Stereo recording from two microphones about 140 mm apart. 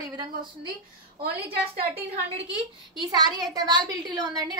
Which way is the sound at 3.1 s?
30° right (ahead or behind).